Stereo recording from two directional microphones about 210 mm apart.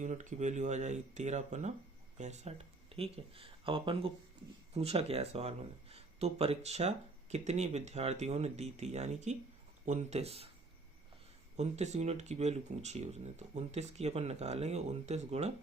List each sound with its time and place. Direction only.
0.0 s speech: 35° right (ahead or behind)
11.5 s speech: 30° right (ahead or behind)